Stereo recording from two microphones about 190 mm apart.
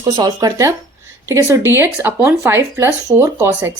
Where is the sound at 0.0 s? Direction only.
25° right (ahead or behind).